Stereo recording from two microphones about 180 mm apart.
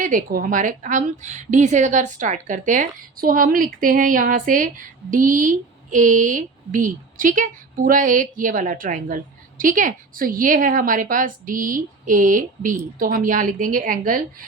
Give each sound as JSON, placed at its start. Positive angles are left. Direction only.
{"t": 0.0, "sound": "a woman's voice", "side_deg": -50}